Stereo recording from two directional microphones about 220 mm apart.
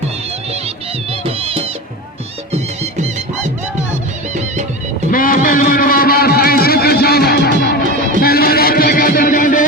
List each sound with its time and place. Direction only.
1.2 s music: 25° right (ahead or behind)
5.1 s a sound: 40° left (ahead or behind)
8.2 s music: 45° left (ahead or behind)